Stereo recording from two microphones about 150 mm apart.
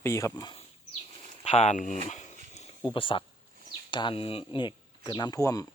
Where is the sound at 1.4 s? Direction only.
40° left (ahead or behind).